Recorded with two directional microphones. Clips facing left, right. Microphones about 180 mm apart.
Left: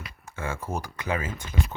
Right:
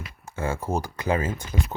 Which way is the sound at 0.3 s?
30° right (ahead or behind).